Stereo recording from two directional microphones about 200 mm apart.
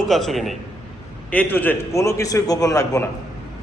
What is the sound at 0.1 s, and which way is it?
A man's voice, centre (ahead or behind).